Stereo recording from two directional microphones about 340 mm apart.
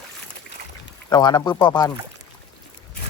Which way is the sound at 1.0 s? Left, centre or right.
Centre.